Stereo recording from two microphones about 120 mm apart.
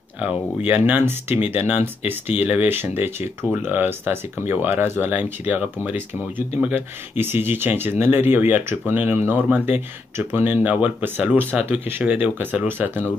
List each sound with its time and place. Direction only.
0.2 s speech: 15° right (ahead or behind)